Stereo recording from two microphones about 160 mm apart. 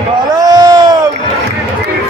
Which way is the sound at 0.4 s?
25° right (ahead or behind).